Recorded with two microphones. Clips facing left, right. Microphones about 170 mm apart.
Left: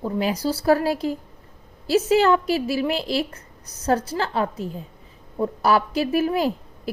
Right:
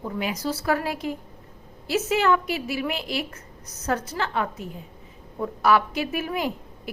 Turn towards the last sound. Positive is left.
turn(degrees=35)  # may be behind; listen again after turning